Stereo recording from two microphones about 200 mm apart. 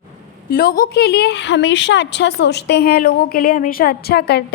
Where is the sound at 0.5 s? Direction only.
50° left (ahead or behind).